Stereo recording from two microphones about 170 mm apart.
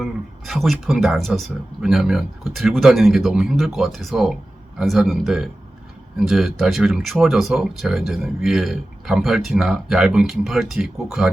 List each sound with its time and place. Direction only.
0.0 s speech: centre (ahead or behind)